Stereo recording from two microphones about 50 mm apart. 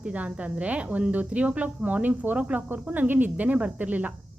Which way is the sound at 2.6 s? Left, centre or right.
Right.